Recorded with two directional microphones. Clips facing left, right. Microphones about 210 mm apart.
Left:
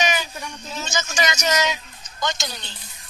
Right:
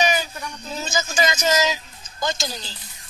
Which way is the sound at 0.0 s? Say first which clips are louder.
Right 2 dB; 35° right (ahead or behind).